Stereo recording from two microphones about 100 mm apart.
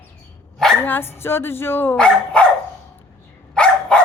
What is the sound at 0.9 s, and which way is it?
Speech, 20° left (ahead or behind).